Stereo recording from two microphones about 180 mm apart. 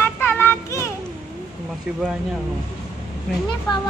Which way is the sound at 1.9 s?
5° right (ahead or behind).